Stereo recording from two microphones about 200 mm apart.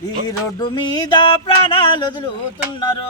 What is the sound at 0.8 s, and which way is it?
Music, 20° left (ahead or behind).